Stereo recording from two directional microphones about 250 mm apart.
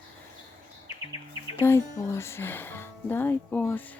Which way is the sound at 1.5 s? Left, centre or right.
Centre.